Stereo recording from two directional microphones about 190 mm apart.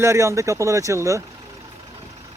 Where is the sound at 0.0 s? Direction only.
15° right (ahead or behind).